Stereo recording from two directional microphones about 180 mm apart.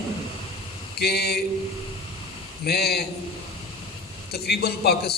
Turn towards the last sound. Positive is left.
turn(degrees=60)  # may be behind; listen again after turning